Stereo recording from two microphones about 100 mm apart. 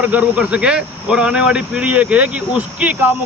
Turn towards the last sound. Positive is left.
turn(degrees=-10)  # may be behind; listen again after turning